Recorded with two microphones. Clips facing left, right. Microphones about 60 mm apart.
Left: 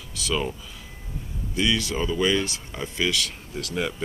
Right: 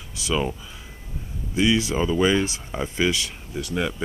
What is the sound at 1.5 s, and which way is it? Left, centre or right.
Speech, centre.